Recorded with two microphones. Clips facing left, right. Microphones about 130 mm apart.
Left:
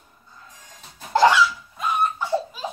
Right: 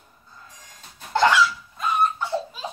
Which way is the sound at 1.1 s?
5° left (ahead or behind).